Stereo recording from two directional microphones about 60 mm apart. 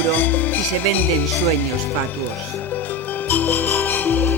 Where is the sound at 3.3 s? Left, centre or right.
Left.